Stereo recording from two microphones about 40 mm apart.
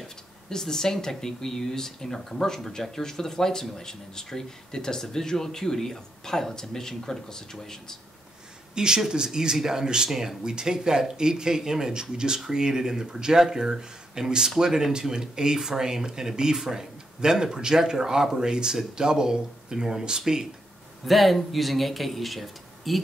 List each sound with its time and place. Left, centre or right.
0.0 s speech: centre
8.7 s speech: centre
21.0 s speech: centre